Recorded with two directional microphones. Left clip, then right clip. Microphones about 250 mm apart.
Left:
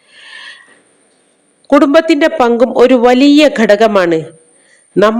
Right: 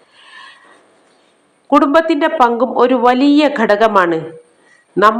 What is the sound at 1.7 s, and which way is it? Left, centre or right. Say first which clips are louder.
A woman's voice: left 3 dB; left.